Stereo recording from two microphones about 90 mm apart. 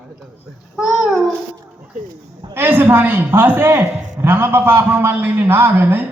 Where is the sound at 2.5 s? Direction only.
25° right (ahead or behind).